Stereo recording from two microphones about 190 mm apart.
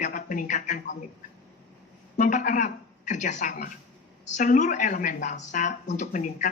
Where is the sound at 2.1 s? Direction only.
45° left (ahead or behind).